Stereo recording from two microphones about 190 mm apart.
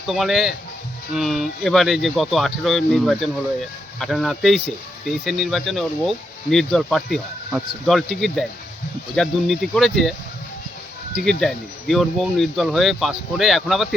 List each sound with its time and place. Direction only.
0.1 s speech: centre (ahead or behind)
11.3 s speech: 5° left (ahead or behind)